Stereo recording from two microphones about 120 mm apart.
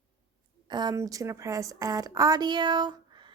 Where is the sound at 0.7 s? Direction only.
35° right (ahead or behind).